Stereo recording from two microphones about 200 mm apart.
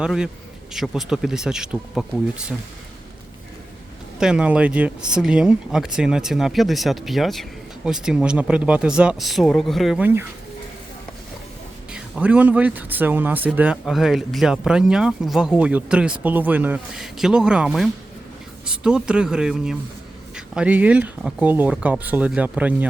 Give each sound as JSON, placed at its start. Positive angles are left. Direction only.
{"t": 0.0, "sound": "speech", "side_deg": -5}
{"t": 4.2, "sound": "speech", "side_deg": -5}
{"t": 11.9, "sound": "speech", "side_deg": -5}